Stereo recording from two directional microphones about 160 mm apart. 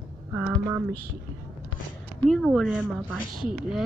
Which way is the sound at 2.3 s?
Centre (ahead or behind).